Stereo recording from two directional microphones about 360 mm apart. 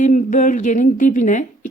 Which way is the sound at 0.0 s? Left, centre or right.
Left.